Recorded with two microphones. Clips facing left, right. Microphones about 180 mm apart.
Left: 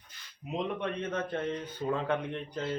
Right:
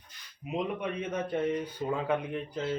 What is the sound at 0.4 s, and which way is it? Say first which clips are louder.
Speech: right 1 dB; 10° right (ahead or behind).